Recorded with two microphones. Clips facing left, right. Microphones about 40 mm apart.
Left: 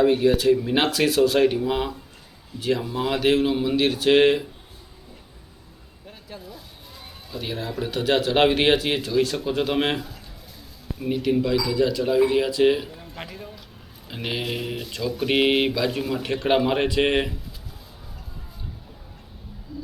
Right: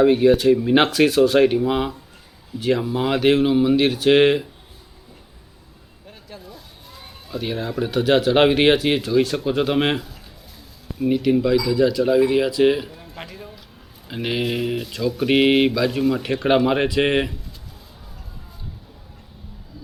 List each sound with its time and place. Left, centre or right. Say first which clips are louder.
0.0 s speech: right 4 dB; right
0.9 s speech: right 4 dB; centre
6.1 s a sound: even; centre
7.7 s speech: right 4 dB; centre